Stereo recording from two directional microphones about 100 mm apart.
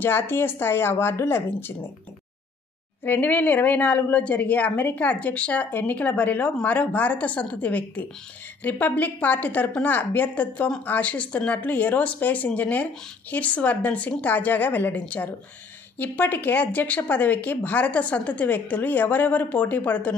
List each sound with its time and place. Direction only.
0.0 s speech: 20° left (ahead or behind)
3.0 s speech: 20° left (ahead or behind)